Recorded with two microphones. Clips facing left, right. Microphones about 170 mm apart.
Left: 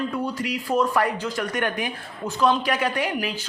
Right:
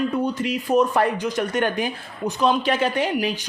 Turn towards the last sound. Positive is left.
turn(degrees=-15)  # may be behind; listen again after turning